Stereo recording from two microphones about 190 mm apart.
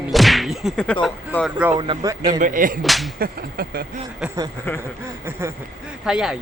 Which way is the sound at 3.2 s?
55° right (ahead or behind).